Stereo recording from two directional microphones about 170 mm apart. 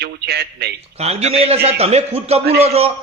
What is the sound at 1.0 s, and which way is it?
A man's voice, 40° right (ahead or behind).